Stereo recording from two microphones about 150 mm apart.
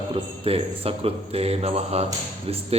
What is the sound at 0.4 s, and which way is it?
A man's voice, 40° right (ahead or behind).